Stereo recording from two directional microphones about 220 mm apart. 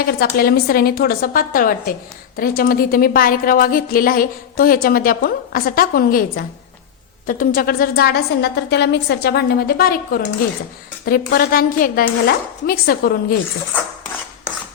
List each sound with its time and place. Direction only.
0.0 s a woman's voice: 45° left (ahead or behind)